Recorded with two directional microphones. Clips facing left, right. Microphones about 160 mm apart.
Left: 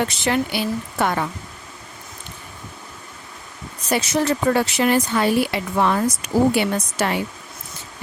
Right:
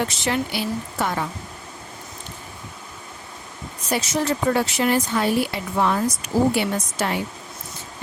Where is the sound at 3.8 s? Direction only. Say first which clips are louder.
Left 3 dB; 65° left (ahead or behind).